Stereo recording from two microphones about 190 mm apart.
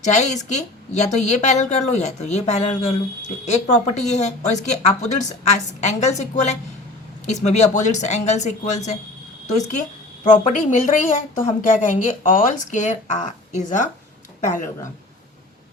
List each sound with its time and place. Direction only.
0.0 s a woman's voice: 40° left (ahead or behind)
10.3 s a woman's voice: 40° left (ahead or behind)